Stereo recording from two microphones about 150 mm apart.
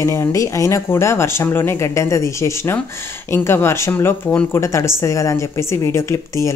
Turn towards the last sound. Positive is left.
turn(degrees=20)  # may be behind; listen again after turning